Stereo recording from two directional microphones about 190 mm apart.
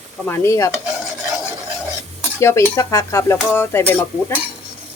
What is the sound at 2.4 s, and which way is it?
Dishes, 15° left (ahead or behind).